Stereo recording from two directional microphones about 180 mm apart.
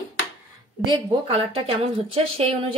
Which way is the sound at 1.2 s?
30° right (ahead or behind).